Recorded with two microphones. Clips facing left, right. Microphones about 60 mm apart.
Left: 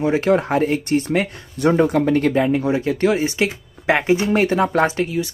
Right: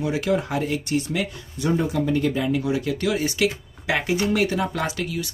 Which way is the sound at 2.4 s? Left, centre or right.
Left.